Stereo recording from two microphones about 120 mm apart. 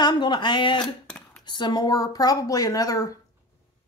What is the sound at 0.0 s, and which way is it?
Speech, 40° left (ahead or behind).